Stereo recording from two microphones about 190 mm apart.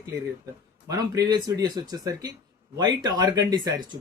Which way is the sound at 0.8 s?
20° right (ahead or behind).